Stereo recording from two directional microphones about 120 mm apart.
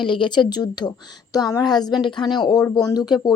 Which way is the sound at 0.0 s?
40° left (ahead or behind).